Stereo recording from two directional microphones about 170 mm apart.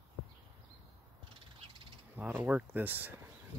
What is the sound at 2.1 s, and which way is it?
Speech, 10° right (ahead or behind).